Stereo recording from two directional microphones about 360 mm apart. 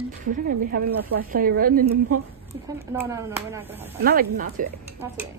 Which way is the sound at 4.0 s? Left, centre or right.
Right.